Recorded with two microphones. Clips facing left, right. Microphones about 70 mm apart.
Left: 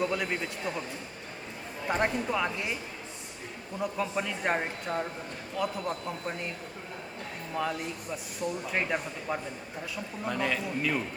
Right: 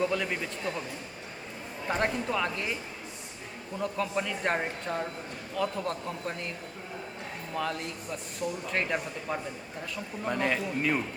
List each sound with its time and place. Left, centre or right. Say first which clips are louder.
0.0 s speech: right 1 dB; centre
2.0 s speech: even; centre
3.8 s speech: even; centre
7.5 s speech: left 1 dB; centre
10.2 s a man's voice: right 2 dB; centre